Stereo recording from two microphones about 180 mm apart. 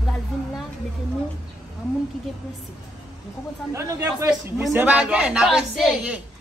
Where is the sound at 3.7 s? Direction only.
15° right (ahead or behind).